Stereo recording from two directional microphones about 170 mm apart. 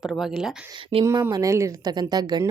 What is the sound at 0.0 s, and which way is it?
Speech, centre (ahead or behind).